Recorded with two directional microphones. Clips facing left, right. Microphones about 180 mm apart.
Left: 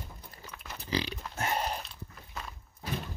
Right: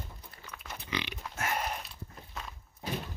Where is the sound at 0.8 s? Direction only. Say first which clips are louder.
Left 5 dB; 35° left (ahead or behind).